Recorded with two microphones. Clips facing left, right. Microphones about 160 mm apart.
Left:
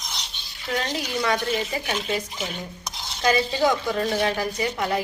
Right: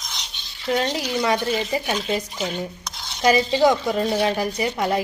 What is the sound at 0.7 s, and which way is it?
Speech, 20° right (ahead or behind).